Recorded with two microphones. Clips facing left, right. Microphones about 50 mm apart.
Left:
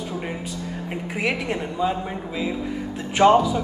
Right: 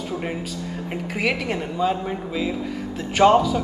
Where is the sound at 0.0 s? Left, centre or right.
Centre.